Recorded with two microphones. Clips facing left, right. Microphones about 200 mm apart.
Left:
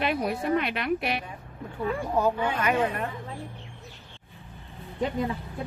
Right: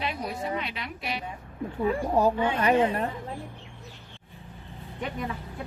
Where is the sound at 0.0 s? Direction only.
60° left (ahead or behind).